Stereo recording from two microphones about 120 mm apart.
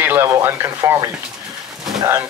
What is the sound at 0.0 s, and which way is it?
Speech, 20° right (ahead or behind).